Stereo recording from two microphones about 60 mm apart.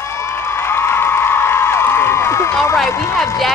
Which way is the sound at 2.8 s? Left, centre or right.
Left.